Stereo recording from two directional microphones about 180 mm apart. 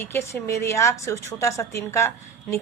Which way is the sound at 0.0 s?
15° left (ahead or behind).